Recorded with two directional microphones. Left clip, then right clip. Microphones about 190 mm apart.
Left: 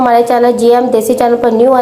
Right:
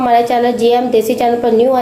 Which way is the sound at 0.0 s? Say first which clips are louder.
Left 3 dB; 20° left (ahead or behind).